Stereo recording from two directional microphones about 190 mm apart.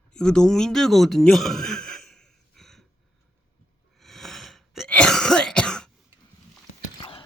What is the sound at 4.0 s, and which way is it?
Cough, centre (ahead or behind).